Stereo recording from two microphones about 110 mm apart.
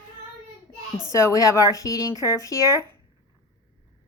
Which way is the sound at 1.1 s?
30° left (ahead or behind).